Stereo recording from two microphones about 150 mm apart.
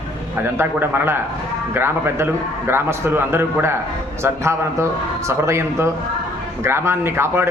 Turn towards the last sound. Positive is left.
turn(degrees=-15)  # may be behind; listen again after turning